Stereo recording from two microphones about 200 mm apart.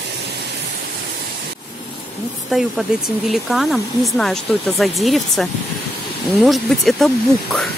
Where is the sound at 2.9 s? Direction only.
5° right (ahead or behind).